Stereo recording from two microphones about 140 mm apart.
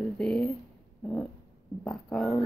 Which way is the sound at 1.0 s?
5° left (ahead or behind).